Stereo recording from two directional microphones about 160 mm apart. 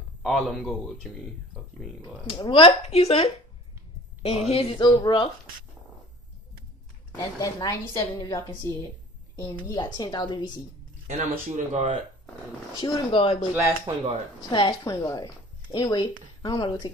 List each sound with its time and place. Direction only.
0.2 s a man's voice: centre (ahead or behind)
2.0 s speech: 30° left (ahead or behind)
7.2 s speech: 20° left (ahead or behind)
11.1 s speech: 50° right (ahead or behind)
12.7 s speech: 30° left (ahead or behind)
13.6 s speech: 20° right (ahead or behind)
14.5 s speech: 30° left (ahead or behind)